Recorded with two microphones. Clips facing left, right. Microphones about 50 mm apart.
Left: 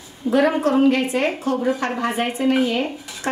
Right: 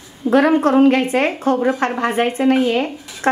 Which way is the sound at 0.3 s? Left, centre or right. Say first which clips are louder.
Right 4 dB; right.